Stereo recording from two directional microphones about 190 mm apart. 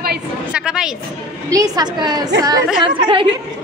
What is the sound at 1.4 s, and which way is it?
A woman's voice, 20° right (ahead or behind).